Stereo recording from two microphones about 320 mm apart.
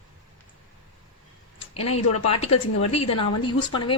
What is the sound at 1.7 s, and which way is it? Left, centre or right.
Speech, centre.